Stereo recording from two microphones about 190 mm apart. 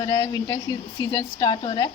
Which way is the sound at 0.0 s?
20° left (ahead or behind).